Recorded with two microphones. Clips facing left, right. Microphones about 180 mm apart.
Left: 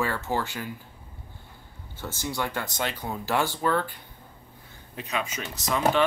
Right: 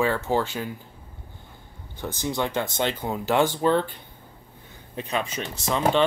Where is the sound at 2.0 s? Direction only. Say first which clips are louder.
Right 4 dB; 20° right (ahead or behind).